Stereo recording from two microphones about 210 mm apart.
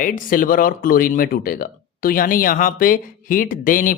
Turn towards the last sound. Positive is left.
turn(degrees=40)  # may be behind; listen again after turning